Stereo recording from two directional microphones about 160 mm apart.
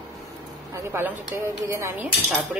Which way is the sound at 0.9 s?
15° right (ahead or behind).